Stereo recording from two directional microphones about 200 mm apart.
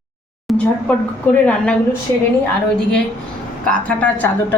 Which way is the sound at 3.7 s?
5° left (ahead or behind).